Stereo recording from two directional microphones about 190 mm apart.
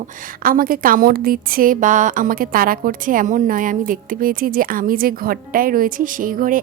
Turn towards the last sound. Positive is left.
turn(degrees=-45)  # may be behind; listen again after turning